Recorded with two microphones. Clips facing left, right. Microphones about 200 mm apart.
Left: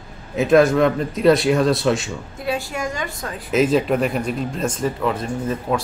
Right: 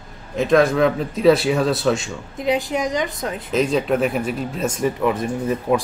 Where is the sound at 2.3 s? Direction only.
20° right (ahead or behind).